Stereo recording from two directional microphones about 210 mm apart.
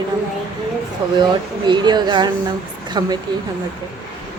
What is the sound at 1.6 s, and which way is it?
Speech, 20° right (ahead or behind).